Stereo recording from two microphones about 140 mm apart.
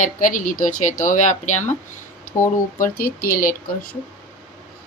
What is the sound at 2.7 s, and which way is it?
Speech, 75° left (ahead or behind).